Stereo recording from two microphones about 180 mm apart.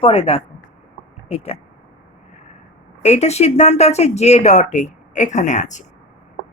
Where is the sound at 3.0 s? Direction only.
35° left (ahead or behind).